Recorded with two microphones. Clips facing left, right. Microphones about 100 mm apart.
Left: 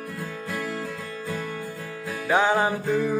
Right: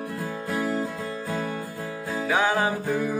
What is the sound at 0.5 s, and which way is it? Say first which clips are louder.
Music: right 5 dB; 35° right (ahead or behind).